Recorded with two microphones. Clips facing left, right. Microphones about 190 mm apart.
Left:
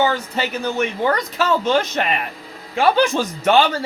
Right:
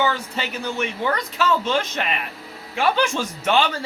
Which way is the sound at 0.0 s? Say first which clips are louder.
Left 4 dB; 40° left (ahead or behind).